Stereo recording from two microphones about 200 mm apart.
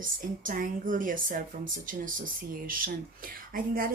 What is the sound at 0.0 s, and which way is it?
A woman's voice, 40° right (ahead or behind).